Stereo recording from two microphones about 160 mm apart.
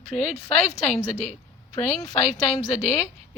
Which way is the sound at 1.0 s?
45° left (ahead or behind).